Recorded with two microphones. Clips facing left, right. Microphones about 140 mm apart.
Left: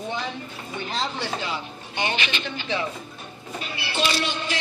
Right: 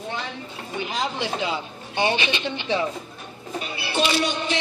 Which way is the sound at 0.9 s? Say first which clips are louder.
Right 1 dB; 15° right (ahead or behind).